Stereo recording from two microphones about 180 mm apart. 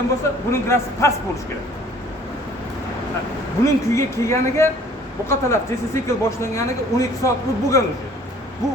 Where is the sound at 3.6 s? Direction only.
15° left (ahead or behind).